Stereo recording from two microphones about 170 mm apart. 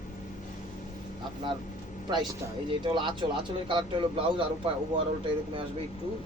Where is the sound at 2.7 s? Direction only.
30° right (ahead or behind).